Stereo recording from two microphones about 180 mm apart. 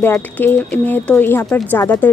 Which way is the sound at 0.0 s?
15° left (ahead or behind).